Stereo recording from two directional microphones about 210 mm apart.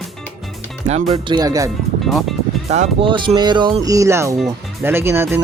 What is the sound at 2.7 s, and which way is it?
Speech, 30° right (ahead or behind).